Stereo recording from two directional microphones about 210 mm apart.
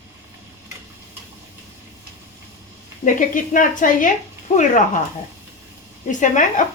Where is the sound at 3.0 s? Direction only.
40° left (ahead or behind).